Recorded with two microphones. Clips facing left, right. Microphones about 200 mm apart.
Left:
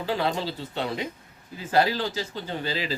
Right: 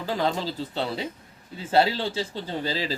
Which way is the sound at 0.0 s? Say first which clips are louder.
Even; 40° right (ahead or behind).